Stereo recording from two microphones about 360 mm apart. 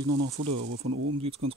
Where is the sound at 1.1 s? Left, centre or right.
Centre.